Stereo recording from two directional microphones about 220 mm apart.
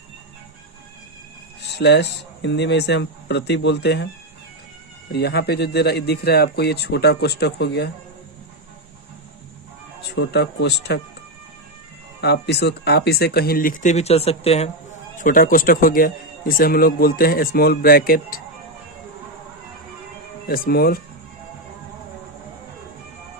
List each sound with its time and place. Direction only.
1.7 s speech: 50° left (ahead or behind)
5.1 s speech: 50° left (ahead or behind)
10.2 s speech: 50° left (ahead or behind)
12.2 s speech: 50° left (ahead or behind); by 14.7 s 25° left (ahead or behind)
15.2 s a man's voice: 40° left (ahead or behind)
20.5 s speech: 45° left (ahead or behind)